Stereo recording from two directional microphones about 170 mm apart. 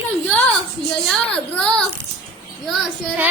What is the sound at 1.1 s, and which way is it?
Speech, 5° left (ahead or behind).